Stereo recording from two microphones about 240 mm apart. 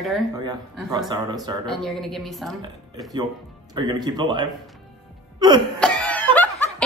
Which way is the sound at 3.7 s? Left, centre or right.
Centre.